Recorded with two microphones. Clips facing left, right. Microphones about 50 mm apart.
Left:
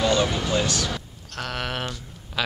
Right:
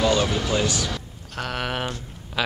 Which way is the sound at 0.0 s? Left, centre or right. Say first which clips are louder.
Right 1 dB; centre.